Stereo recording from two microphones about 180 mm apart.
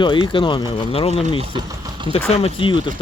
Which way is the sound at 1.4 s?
25° right (ahead or behind).